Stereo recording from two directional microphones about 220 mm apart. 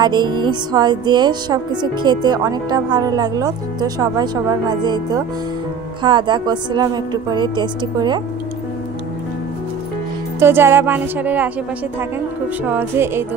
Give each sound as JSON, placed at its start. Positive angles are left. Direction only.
{"t": 0.0, "sound": "speech", "side_deg": -20}
{"t": 10.4, "sound": "speech", "side_deg": -10}
{"t": 12.6, "sound": "speech", "side_deg": -10}